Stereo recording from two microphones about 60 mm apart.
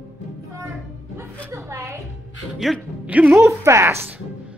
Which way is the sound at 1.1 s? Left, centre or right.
Right.